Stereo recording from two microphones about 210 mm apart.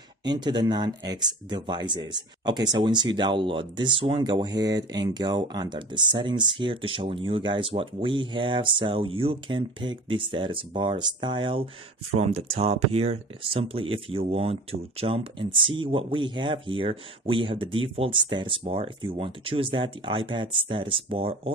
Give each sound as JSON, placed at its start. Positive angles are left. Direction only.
{"t": 0.2, "sound": "speech", "side_deg": -20}